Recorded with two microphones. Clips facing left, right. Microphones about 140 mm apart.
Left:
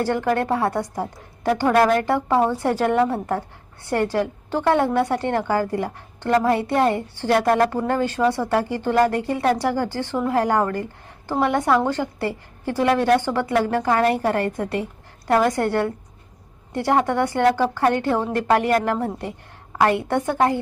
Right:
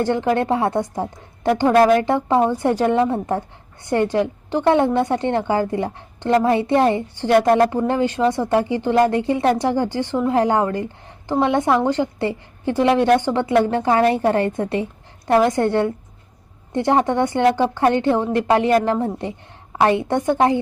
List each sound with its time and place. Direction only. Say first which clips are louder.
0.0 s a woman's voice: right 2 dB; 20° right (ahead or behind)